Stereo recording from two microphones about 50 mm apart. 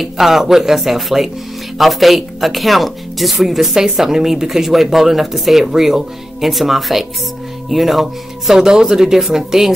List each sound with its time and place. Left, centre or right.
0.0 s speech: centre